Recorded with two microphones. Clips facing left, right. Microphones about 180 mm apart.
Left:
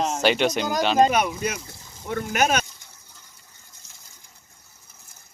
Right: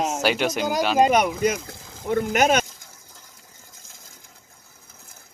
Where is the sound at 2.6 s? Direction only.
90° right.